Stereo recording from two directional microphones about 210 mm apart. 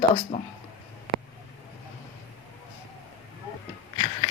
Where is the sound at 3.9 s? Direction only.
20° left (ahead or behind).